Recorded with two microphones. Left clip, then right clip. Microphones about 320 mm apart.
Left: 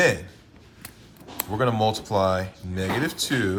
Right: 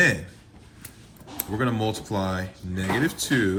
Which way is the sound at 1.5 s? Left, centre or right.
Centre.